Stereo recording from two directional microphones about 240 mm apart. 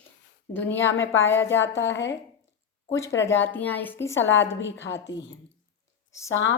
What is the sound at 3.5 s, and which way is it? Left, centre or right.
Speech, centre.